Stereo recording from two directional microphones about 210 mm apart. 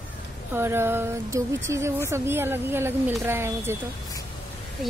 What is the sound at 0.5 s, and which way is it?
Speech, 10° right (ahead or behind).